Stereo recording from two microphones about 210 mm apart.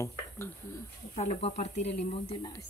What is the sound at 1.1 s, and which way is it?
Speech, 30° left (ahead or behind).